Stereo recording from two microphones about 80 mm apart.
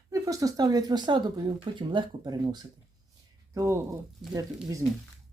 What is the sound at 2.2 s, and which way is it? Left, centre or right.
Speech, right.